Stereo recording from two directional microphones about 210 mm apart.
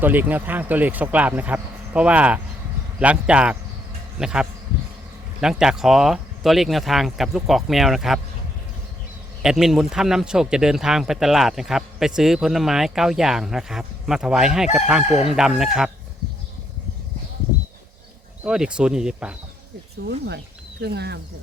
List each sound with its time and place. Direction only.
0.0 s speech: 10° right (ahead or behind)
9.4 s speech: centre (ahead or behind)
18.4 s speech: 5° right (ahead or behind)
20.1 s speech: 55° right (ahead or behind)